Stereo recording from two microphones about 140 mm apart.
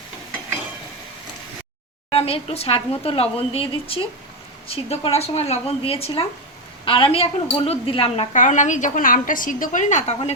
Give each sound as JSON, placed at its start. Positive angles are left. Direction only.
{"t": 2.0, "sound": "speech", "side_deg": 45}
{"t": 8.4, "sound": "a woman's voice", "side_deg": 60}